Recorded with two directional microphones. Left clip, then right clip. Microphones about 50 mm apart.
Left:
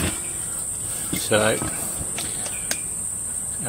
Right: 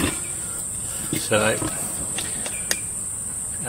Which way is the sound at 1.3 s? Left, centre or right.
Left.